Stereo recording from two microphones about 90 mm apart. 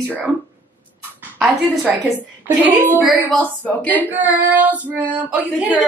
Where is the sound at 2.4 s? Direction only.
20° right (ahead or behind).